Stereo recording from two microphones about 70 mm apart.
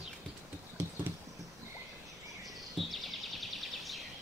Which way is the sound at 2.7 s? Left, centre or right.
Centre.